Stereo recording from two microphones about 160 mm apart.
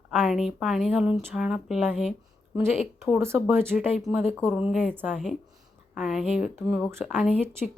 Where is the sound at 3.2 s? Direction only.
15° right (ahead or behind).